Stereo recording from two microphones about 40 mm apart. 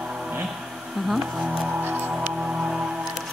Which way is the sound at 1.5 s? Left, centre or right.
Right.